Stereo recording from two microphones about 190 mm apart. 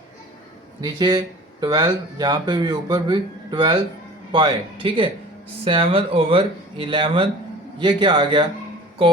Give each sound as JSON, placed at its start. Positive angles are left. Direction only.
{"t": 0.8, "sound": "a man's voice", "side_deg": -20}